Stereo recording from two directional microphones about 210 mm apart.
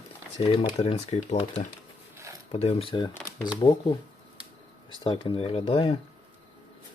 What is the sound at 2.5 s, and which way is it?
Speech, 30° left (ahead or behind).